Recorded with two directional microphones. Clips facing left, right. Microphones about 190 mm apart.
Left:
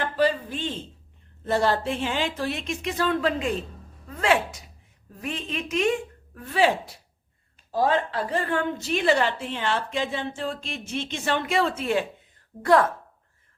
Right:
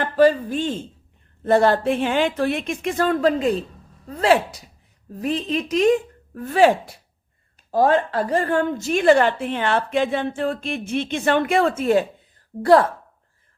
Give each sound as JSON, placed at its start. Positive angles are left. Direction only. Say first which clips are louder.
{"t": 0.2, "sound": "a woman's voice", "louder": "right 8 dB", "side_deg": -45}
{"t": 12.5, "sound": "a woman's voice", "louder": "right 9 dB", "side_deg": -25}